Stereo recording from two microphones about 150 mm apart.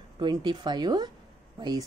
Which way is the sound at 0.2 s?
30° right (ahead or behind).